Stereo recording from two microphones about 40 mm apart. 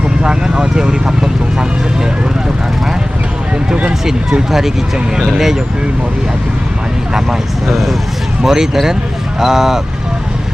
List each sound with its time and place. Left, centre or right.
0.2 s speech: right
4.0 s speech: centre
7.1 s speech: centre